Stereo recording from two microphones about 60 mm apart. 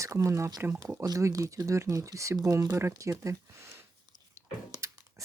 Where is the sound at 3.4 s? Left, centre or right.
Right.